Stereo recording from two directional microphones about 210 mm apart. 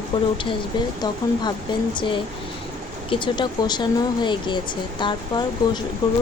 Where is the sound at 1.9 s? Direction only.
20° left (ahead or behind).